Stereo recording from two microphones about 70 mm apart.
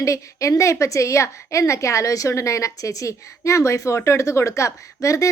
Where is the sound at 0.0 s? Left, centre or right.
Left.